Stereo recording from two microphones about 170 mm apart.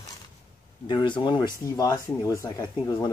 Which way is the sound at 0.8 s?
25° left (ahead or behind).